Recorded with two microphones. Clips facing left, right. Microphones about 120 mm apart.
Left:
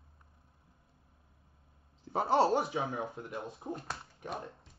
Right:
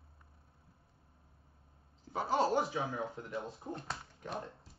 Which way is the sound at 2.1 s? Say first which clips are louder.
Left 4 dB; 35° left (ahead or behind).